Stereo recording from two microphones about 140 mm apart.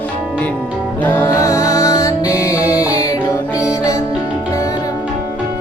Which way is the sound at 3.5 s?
25° left (ahead or behind).